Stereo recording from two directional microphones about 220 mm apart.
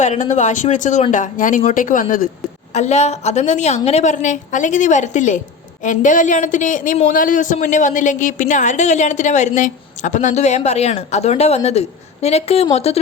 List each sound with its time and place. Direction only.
0.0 s speech: 35° left (ahead or behind)